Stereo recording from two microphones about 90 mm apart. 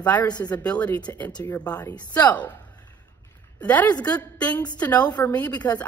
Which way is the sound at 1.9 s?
15° left (ahead or behind).